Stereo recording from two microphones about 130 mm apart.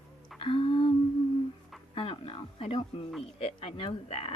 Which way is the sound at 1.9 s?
50° left (ahead or behind).